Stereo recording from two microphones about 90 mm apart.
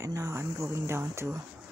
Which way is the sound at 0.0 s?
35° right (ahead or behind).